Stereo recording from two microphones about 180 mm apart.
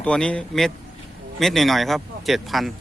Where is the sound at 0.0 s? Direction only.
5° left (ahead or behind).